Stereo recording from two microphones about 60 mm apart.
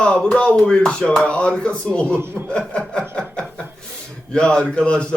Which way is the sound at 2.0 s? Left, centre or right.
Right.